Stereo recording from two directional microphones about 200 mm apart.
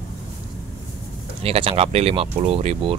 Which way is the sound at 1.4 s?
30° right (ahead or behind).